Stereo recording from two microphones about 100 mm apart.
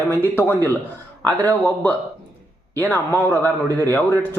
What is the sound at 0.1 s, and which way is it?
Speech, 20° left (ahead or behind).